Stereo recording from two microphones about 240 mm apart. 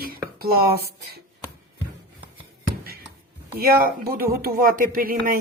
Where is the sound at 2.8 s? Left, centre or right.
Right.